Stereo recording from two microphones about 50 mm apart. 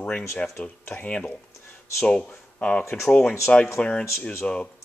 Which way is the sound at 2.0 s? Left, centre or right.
Left.